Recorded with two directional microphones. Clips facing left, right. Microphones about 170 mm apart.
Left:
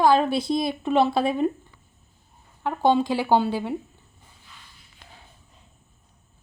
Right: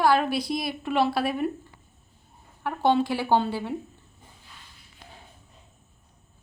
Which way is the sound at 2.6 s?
15° left (ahead or behind).